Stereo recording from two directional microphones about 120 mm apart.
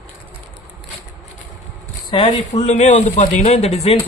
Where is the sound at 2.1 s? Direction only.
45° left (ahead or behind).